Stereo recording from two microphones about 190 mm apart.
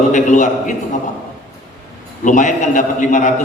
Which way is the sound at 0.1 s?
40° left (ahead or behind).